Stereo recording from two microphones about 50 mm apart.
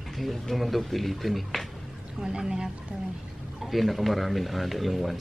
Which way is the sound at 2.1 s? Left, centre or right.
Centre.